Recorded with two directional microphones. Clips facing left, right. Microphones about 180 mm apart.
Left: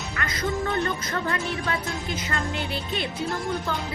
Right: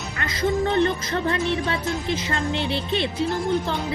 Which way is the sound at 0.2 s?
25° right (ahead or behind).